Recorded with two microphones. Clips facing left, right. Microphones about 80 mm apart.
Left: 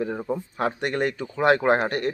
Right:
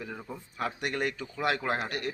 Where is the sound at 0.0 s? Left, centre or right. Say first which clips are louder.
Left 13 dB; left.